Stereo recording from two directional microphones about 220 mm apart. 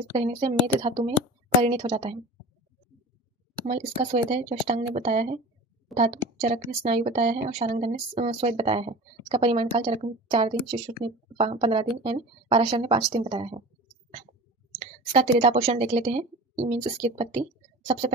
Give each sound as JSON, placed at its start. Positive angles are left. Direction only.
{"t": 0.1, "sound": "a woman's voice", "side_deg": -25}
{"t": 3.6, "sound": "a woman's voice", "side_deg": -30}
{"t": 7.7, "sound": "a woman's voice", "side_deg": -35}
{"t": 14.8, "sound": "speech", "side_deg": -25}